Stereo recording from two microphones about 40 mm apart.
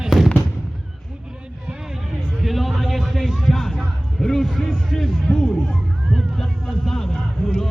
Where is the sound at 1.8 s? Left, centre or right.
Centre.